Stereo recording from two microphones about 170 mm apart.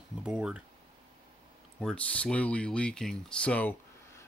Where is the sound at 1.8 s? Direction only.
5° left (ahead or behind).